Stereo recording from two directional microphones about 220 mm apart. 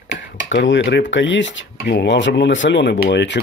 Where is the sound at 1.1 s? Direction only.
55° left (ahead or behind).